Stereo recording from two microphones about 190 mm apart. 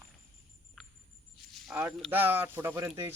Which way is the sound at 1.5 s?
5° right (ahead or behind).